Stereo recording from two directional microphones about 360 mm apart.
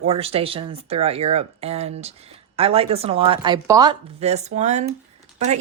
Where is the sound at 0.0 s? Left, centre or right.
Centre.